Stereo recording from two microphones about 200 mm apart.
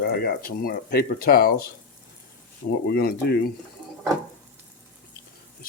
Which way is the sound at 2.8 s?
55° left (ahead or behind).